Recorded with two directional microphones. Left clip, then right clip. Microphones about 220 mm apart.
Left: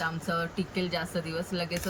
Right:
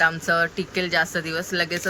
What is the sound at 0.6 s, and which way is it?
Speech, 5° right (ahead or behind).